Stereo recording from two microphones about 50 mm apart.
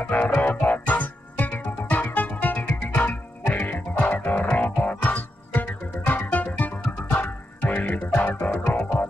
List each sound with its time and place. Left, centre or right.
0.0 s music: left
8.5 s music: left